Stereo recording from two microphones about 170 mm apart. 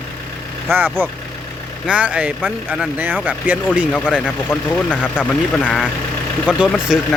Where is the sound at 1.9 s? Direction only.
10° right (ahead or behind).